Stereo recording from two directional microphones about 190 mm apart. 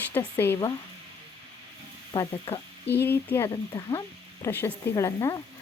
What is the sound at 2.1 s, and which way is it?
Speech, 25° left (ahead or behind).